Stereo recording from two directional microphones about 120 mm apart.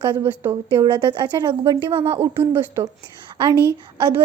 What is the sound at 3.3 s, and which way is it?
Speech, 40° right (ahead or behind).